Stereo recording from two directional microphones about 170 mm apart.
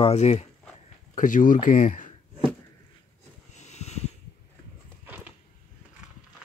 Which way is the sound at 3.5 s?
40° left (ahead or behind).